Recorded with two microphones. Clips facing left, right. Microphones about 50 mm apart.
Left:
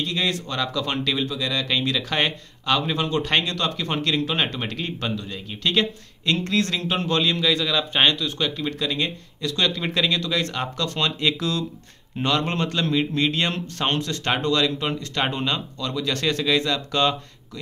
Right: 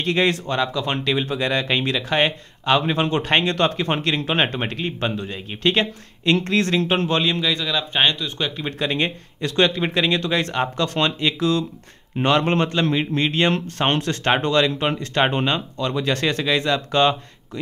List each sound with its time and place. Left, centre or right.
0.0 s speech: right
0.6 s speech: centre
1.2 s speech: right; by 7.4 s centre
7.4 s speech: centre
8.6 s speech: right
11.1 s speech: centre
12.2 s speech: right
13.7 s speech: right